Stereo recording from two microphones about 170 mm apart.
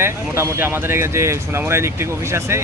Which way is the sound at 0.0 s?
15° right (ahead or behind).